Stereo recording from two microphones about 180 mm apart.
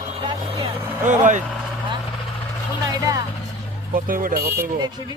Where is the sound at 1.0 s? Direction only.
45° right (ahead or behind).